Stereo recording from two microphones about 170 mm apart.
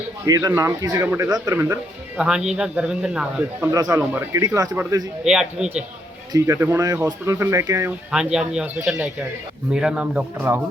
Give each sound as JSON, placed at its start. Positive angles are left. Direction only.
{"t": 0.3, "sound": "a man's voice", "side_deg": -20}
{"t": 3.7, "sound": "speech", "side_deg": -20}
{"t": 5.2, "sound": "a man's voice", "side_deg": -5}
{"t": 6.3, "sound": "speech", "side_deg": -15}
{"t": 8.1, "sound": "a man's voice", "side_deg": -5}